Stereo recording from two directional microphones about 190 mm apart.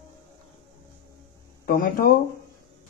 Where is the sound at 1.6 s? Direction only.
45° left (ahead or behind).